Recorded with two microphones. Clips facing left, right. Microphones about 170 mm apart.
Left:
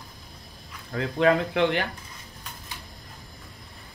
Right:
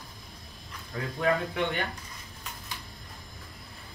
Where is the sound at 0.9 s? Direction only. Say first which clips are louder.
Left 6 dB; 75° left (ahead or behind).